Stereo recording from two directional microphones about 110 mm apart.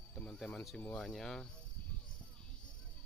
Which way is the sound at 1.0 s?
5° left (ahead or behind).